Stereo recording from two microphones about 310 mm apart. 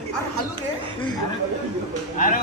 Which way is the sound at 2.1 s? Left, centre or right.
Left.